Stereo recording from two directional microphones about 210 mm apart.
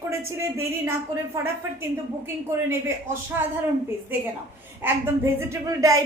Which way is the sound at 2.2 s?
10° right (ahead or behind).